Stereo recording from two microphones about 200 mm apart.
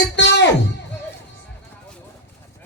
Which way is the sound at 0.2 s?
60° left (ahead or behind).